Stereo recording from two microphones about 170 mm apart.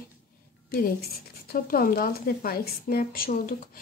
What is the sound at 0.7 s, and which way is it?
A woman's voice, 60° left (ahead or behind).